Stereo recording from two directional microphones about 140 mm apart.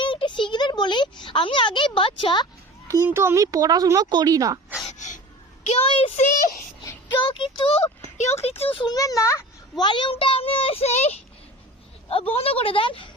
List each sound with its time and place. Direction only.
0.0 s a sound: 35° left (ahead or behind)
2.8 s speech: 20° right (ahead or behind)
4.9 s gasp: 60° left (ahead or behind)
5.6 s a child's voice: 50° left (ahead or behind)
7.3 s a child's voice: 40° left (ahead or behind)
8.9 s a child's voice: 25° left (ahead or behind)
9.8 s a child's voice: 35° left (ahead or behind); by 11.2 s 50° left (ahead or behind)
12.0 s a woman's voice: 40° left (ahead or behind)